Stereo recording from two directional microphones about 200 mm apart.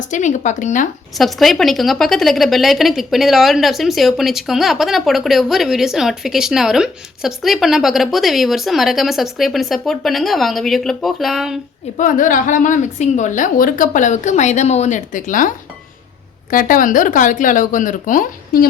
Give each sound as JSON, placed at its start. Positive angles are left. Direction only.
{"t": 0.1, "sound": "a woman's voice", "side_deg": 35}
{"t": 1.1, "sound": "a woman's voice", "side_deg": 0}
{"t": 11.9, "sound": "a woman's voice", "side_deg": 40}